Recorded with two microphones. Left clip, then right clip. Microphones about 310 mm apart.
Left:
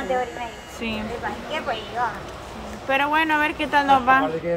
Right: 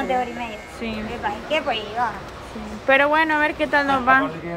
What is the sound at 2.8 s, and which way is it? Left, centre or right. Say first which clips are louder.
Speech: right 4 dB; centre.